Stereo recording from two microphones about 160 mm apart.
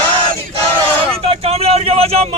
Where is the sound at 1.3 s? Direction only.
40° right (ahead or behind).